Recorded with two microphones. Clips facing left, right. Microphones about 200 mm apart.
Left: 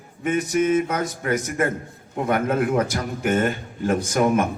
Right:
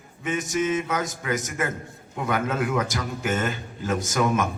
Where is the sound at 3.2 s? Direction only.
55° left (ahead or behind).